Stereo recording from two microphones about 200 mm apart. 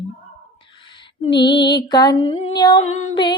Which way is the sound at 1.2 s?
25° left (ahead or behind).